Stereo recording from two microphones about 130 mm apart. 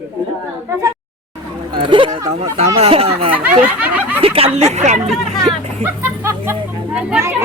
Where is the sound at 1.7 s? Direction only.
40° right (ahead or behind).